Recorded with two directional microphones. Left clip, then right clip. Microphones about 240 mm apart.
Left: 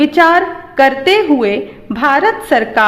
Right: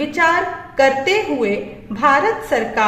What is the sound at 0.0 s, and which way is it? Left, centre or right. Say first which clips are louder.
A woman's voice: left 7 dB; left.